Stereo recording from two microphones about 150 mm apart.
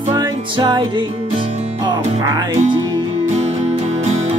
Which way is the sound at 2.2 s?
25° right (ahead or behind).